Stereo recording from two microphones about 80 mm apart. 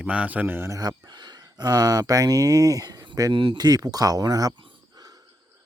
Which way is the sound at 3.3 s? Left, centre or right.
Right.